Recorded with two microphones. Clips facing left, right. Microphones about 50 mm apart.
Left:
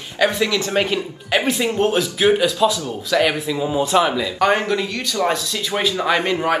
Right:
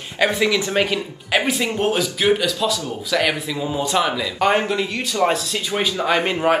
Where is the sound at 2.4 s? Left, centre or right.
Centre.